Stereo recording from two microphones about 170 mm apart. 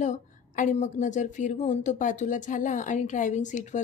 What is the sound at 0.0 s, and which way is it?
A woman's voice, 45° left (ahead or behind).